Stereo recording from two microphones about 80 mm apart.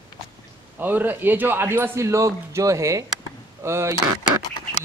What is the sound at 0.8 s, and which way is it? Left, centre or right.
A man's voice, right.